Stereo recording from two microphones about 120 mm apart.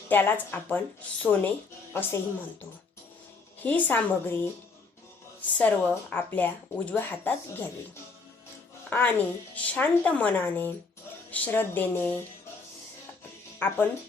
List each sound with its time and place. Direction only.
0.1 s speech: 15° left (ahead or behind)
5.5 s speech: 15° left (ahead or behind)
8.9 s speech: 15° left (ahead or behind)
13.6 s speech: 15° left (ahead or behind)